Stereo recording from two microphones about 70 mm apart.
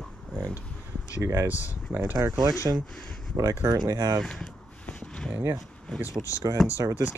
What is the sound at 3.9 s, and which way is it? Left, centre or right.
Speech, right.